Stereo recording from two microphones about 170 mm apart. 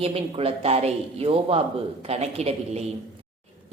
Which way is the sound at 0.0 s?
35° right (ahead or behind).